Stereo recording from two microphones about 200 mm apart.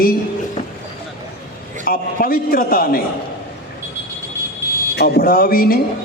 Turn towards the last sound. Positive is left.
turn(degrees=45)  # may be behind; listen again after turning